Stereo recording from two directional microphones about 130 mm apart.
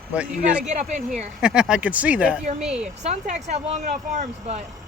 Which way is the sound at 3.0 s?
60° right (ahead or behind).